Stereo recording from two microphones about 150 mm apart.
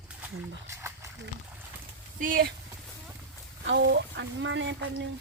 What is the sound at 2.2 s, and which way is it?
Speech, 65° right (ahead or behind).